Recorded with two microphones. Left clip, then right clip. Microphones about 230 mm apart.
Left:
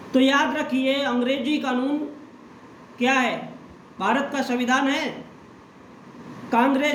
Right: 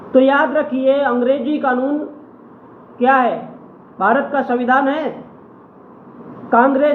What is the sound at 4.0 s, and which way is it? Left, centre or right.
Speech, left.